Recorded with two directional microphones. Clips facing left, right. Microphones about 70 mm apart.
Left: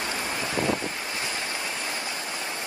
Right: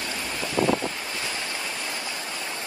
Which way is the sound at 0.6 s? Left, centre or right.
Right.